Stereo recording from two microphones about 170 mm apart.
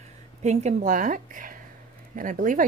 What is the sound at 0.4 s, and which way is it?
A woman's voice, 40° right (ahead or behind).